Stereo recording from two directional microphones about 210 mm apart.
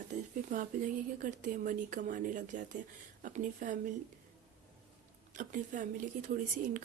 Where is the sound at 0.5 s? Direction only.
40° right (ahead or behind).